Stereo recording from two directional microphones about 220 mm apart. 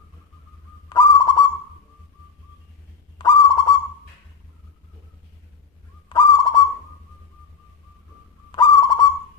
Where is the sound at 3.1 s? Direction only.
20° left (ahead or behind).